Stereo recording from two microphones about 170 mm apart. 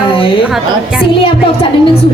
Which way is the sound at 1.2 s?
30° left (ahead or behind).